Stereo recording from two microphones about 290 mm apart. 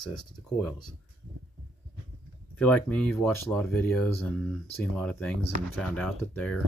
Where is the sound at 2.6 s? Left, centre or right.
Centre.